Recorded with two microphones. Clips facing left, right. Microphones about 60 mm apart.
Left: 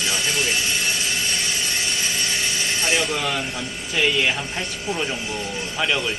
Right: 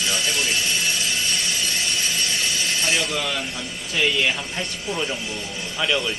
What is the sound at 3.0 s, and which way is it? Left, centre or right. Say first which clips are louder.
Speech: left 2 dB; centre.